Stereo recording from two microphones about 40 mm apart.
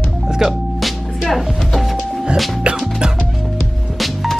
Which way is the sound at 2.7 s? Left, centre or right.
Right.